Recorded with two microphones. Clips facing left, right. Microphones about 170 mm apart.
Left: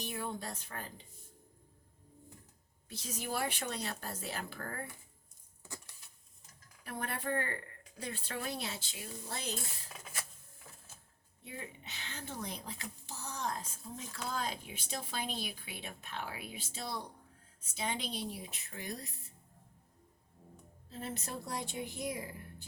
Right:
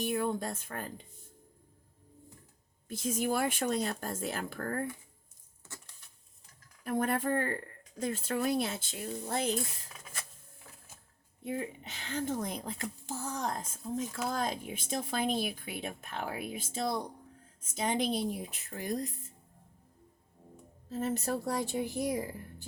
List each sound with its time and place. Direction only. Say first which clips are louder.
0.1 s speech: right 8 dB; 50° right (ahead or behind)
2.9 s speech: right 8 dB; 50° right (ahead or behind)
5.6 s a sound: left 2 dB; 15° left (ahead or behind)
6.8 s speech: right 8 dB; 45° right (ahead or behind)
11.4 s speech: right 10 dB; 45° right (ahead or behind)
20.9 s a woman's voice: right 9 dB; 45° right (ahead or behind)